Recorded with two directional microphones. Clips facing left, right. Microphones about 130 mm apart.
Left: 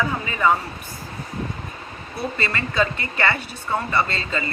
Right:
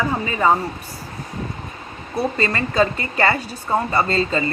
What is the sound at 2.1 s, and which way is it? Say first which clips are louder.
A woman's voice: right 5 dB; 40° right (ahead or behind).